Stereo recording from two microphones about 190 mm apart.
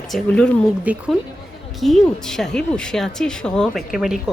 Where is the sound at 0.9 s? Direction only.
10° right (ahead or behind).